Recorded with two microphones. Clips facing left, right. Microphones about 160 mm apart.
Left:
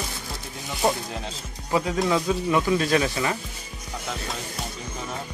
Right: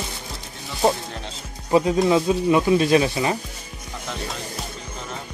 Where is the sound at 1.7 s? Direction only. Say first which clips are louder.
Right 5 dB; 25° right (ahead or behind).